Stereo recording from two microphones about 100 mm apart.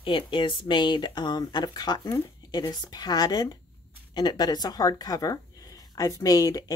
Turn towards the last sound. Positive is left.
turn(degrees=40)  # may be behind; listen again after turning